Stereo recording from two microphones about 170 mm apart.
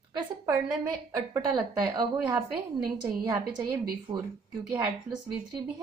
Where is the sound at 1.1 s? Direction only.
25° right (ahead or behind).